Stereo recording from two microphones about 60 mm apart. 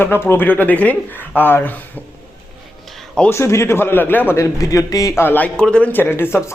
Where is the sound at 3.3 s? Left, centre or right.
Left.